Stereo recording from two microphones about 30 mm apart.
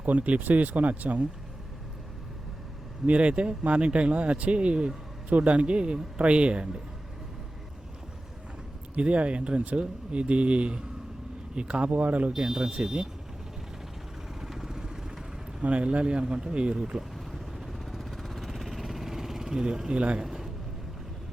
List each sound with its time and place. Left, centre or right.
0.0 s speech: right
3.1 s speech: right
5.3 s speech: right
9.0 s speech: right
11.9 s speech: right
12.3 s speech: centre
14.5 s vehicle: centre
15.6 s speech: right
17.7 s vehicle: centre
19.5 s speech: right
20.2 s a sound: centre